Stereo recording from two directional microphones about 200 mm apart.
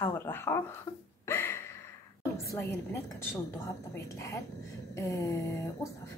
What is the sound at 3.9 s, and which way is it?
A woman's voice, 15° left (ahead or behind).